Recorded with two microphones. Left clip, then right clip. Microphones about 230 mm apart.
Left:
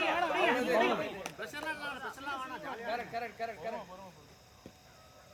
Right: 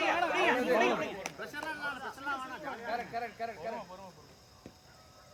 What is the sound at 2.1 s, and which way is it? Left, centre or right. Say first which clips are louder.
Speech: right 2 dB; left.